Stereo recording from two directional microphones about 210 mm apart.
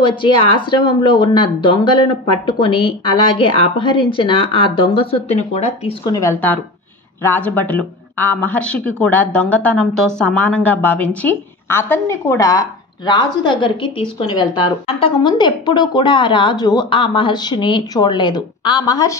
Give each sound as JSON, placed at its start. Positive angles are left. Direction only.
{"t": 0.0, "sound": "speech", "side_deg": 25}
{"t": 6.0, "sound": "speech", "side_deg": 15}